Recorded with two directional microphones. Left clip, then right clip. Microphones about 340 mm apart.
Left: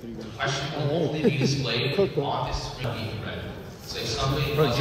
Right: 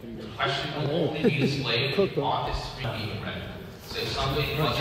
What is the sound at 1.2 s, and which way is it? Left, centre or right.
Speech, centre.